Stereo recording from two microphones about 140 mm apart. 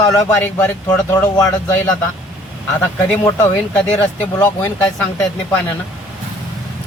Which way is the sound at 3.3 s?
15° left (ahead or behind).